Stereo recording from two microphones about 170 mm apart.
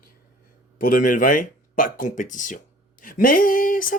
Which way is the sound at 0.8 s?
55° left (ahead or behind).